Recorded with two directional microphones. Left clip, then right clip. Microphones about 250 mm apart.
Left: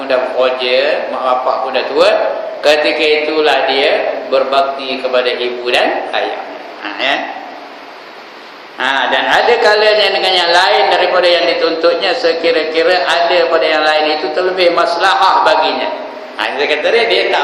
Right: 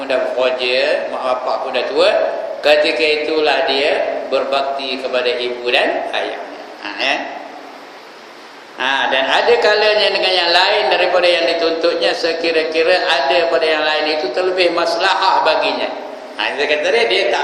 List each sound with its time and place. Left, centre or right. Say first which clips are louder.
0.1 s a man's voice: left 3 dB; centre
8.8 s a man's voice: left 3 dB; centre